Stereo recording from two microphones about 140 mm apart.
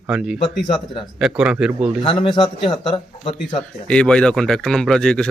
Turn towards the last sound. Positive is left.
turn(degrees=5)  # may be behind; listen again after turning